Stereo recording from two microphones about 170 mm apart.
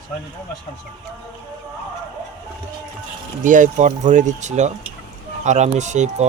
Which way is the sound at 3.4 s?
50° right (ahead or behind).